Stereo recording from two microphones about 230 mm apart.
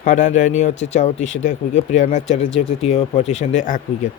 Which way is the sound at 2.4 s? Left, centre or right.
Left.